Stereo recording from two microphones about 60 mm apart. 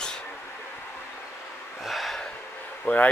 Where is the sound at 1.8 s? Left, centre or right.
Centre.